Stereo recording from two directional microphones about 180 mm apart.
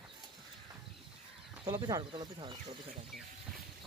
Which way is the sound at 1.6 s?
25° right (ahead or behind).